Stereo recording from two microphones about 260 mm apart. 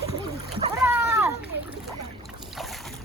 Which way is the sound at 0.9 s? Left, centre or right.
Centre.